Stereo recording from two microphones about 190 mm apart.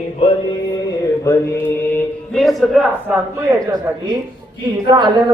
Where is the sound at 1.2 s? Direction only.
15° left (ahead or behind).